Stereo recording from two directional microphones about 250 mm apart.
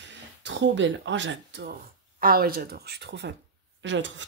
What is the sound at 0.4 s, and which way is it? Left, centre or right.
Speech, right.